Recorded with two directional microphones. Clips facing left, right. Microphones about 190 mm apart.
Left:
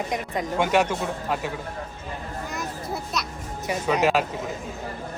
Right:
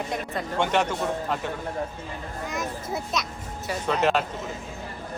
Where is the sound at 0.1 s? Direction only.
10° left (ahead or behind).